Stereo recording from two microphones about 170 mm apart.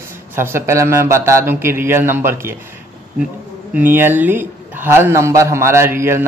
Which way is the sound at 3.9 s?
10° right (ahead or behind).